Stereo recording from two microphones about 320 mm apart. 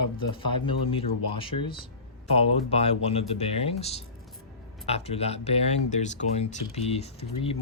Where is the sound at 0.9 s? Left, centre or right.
Centre.